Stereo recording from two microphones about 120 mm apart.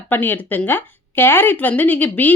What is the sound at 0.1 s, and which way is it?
A woman's voice, 15° left (ahead or behind).